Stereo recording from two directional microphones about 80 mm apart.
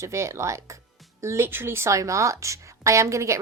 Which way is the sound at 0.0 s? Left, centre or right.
Right.